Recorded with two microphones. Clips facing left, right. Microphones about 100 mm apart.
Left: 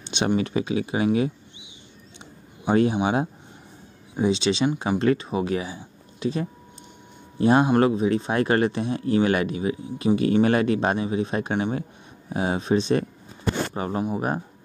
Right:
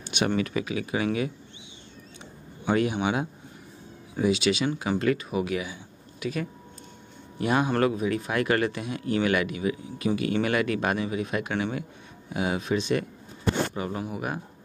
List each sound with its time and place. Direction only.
0.0 s a sound: 30° left (ahead or behind)
0.4 s speech: 30° left (ahead or behind)
2.7 s speech: 30° left (ahead or behind)
4.1 s speech: 25° left (ahead or behind)